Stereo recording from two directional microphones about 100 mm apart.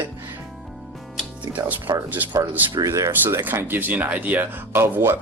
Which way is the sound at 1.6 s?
40° right (ahead or behind).